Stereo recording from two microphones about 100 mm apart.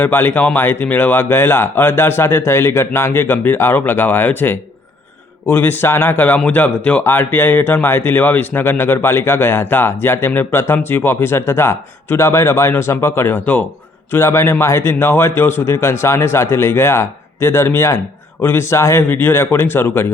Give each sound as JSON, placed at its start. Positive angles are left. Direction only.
{"t": 0.0, "sound": "speech", "side_deg": 20}